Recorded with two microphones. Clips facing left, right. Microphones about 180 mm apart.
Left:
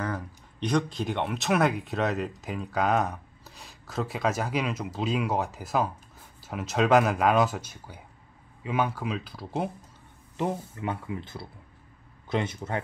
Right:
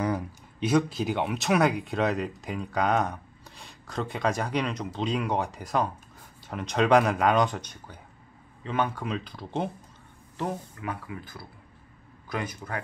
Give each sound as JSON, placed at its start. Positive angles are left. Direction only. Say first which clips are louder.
{"t": 0.0, "sound": "speech", "louder": "right 4 dB", "side_deg": -10}
{"t": 10.3, "sound": "speech", "louder": "left 2 dB", "side_deg": 20}